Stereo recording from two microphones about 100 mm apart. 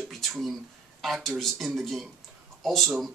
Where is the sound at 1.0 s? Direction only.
Centre (ahead or behind).